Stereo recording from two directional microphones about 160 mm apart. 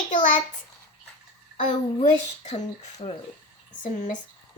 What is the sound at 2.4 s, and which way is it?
Speech, 45° left (ahead or behind).